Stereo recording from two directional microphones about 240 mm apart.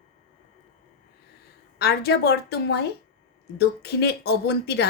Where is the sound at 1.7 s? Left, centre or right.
Left.